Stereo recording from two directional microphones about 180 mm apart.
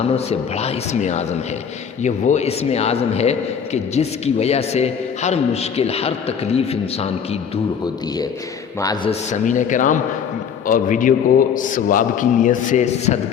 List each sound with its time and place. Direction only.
0.3 s a man's voice: 35° left (ahead or behind)
9.0 s a man's voice: 45° left (ahead or behind)